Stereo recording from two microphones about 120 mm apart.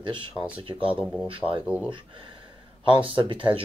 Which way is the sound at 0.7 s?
10° right (ahead or behind).